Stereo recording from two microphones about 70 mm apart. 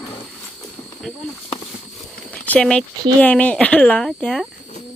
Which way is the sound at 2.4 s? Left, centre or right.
Centre.